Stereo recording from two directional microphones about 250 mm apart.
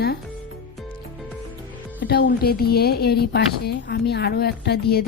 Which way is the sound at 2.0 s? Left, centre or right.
Left.